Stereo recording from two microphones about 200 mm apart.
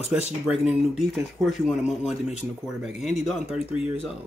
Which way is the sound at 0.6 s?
Centre (ahead or behind).